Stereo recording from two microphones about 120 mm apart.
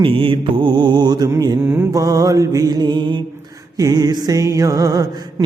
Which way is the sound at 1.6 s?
20° right (ahead or behind).